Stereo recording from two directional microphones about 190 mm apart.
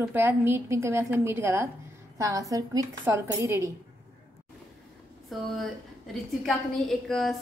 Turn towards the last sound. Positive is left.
turn(degrees=0)  # may be behind; listen again after turning